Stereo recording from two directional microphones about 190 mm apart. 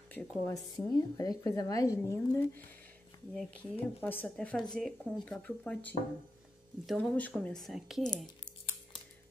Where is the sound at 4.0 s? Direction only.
10° left (ahead or behind).